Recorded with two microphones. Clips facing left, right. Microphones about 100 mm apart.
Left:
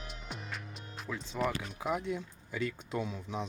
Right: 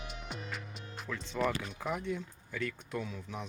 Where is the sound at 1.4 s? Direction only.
10° left (ahead or behind).